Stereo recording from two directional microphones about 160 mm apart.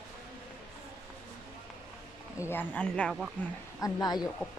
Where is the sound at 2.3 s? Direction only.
15° left (ahead or behind).